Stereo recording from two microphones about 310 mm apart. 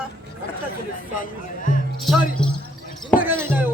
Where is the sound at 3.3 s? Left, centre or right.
Centre.